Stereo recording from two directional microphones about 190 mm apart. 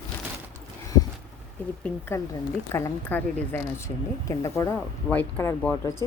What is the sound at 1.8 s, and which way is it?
Speech, 10° left (ahead or behind).